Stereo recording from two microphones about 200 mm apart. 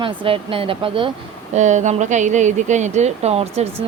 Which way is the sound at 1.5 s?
35° right (ahead or behind).